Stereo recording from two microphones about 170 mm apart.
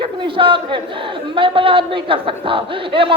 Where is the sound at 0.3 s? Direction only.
30° right (ahead or behind).